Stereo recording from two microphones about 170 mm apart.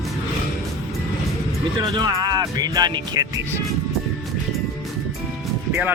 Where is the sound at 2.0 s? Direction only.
25° right (ahead or behind).